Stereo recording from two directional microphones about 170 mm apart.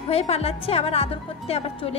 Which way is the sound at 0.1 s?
35° left (ahead or behind).